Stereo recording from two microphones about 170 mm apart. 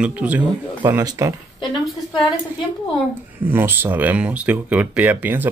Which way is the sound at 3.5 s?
10° right (ahead or behind).